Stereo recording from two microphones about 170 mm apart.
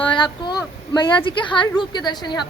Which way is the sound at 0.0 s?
30° left (ahead or behind).